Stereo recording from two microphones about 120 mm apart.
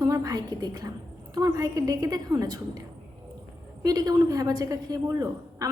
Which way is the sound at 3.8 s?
30° right (ahead or behind).